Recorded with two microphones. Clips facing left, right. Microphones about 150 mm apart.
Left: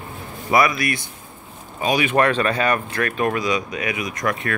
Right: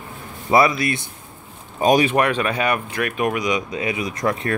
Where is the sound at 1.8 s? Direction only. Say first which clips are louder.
Right 5 dB; 45° right (ahead or behind).